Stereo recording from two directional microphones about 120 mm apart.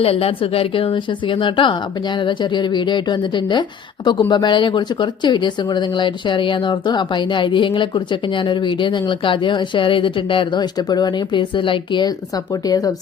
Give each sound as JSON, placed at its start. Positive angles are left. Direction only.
{"t": 0.0, "sound": "a woman's voice", "side_deg": 55}